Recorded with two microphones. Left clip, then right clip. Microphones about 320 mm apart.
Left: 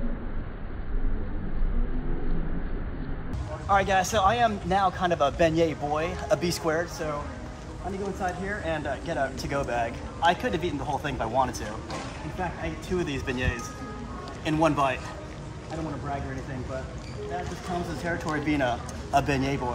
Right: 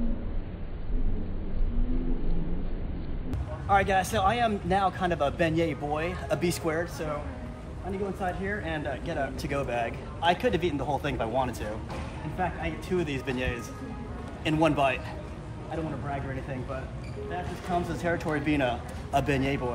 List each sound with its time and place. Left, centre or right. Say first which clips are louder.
3.6 s a man's voice: left 1 dB; centre
8.2 s a man's voice: left 1 dB; centre
12.9 s a man's voice: left 1 dB; centre
18.0 s a man's voice: even; centre